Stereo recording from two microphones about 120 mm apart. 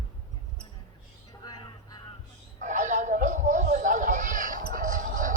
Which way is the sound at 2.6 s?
90° right.